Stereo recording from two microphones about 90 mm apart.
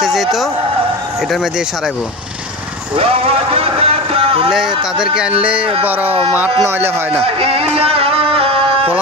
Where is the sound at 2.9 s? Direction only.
90° right.